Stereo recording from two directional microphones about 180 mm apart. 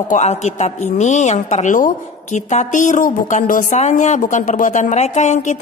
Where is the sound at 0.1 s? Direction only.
40° left (ahead or behind).